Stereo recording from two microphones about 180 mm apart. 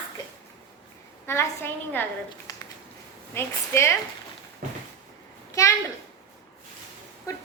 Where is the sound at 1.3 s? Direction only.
15° left (ahead or behind).